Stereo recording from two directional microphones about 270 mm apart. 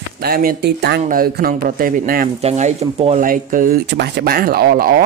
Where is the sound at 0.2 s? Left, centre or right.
Right.